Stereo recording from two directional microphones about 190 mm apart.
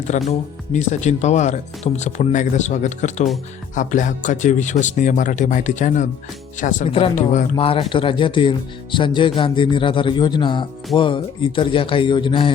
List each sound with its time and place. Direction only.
0.3 s speech: 40° left (ahead or behind)